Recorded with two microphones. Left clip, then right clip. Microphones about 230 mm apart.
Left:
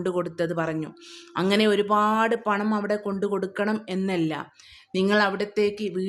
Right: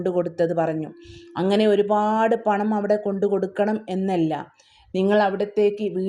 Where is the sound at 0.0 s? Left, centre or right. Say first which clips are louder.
Right 4 dB; centre.